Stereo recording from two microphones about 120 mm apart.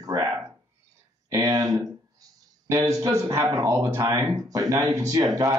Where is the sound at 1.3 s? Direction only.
30° right (ahead or behind).